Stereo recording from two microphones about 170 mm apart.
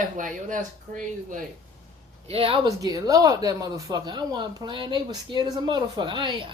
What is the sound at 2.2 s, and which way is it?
Speech, 35° right (ahead or behind).